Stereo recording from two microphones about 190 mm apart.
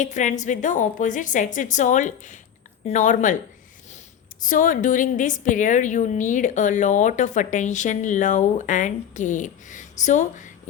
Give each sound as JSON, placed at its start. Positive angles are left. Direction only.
{"t": 0.0, "sound": "a woman's voice", "side_deg": 40}
{"t": 4.4, "sound": "a woman's voice", "side_deg": 45}